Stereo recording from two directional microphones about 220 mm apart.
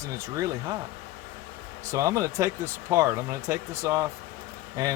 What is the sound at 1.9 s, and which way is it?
Speech, 15° right (ahead or behind).